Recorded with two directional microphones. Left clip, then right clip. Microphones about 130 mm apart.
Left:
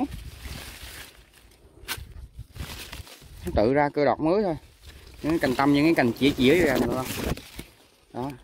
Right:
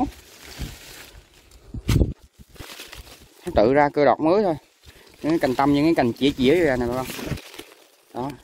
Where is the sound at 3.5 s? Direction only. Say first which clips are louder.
Right 5 dB; 50° right (ahead or behind).